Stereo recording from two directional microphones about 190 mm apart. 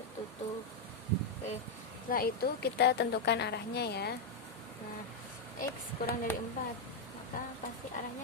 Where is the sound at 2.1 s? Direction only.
55° left (ahead or behind).